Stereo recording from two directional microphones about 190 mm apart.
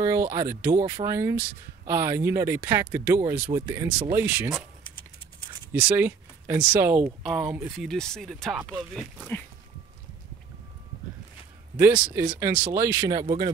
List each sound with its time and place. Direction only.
0.0 s speech: 15° right (ahead or behind)
5.7 s speech: 10° right (ahead or behind)
11.7 s speech: 5° right (ahead or behind)